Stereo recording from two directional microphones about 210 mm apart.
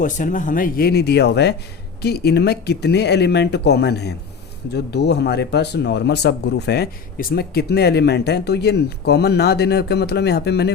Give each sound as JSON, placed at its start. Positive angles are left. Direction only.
{"t": 0.0, "sound": "speech", "side_deg": 40}